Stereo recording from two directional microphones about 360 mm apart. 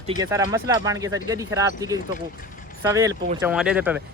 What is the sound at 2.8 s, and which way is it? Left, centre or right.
Speech, centre.